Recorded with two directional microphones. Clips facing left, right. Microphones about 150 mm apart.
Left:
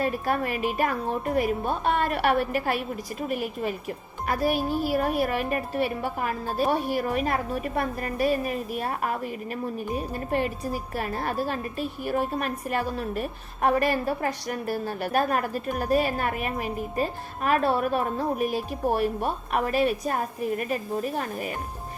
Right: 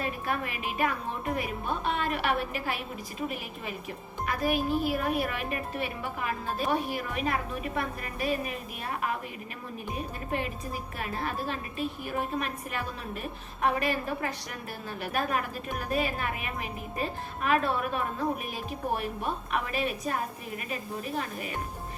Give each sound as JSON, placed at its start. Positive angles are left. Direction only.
{"t": 0.0, "sound": "a woman's voice", "side_deg": 45}